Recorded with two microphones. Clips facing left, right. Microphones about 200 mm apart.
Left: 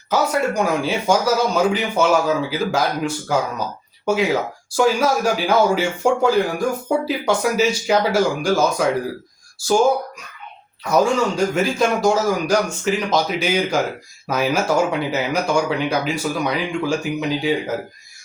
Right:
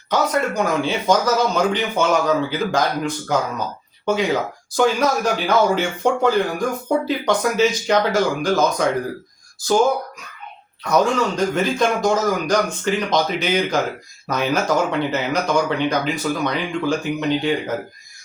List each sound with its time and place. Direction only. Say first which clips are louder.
0.1 s speech: left 1 dB; 10° left (ahead or behind)
10.9 s speech: left 1 dB; 5° left (ahead or behind)